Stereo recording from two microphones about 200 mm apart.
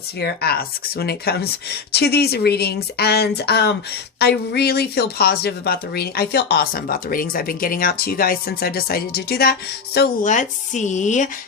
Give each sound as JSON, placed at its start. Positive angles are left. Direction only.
{"t": 0.2, "sound": "a woman's voice", "side_deg": 50}
{"t": 10.3, "sound": "speech", "side_deg": 35}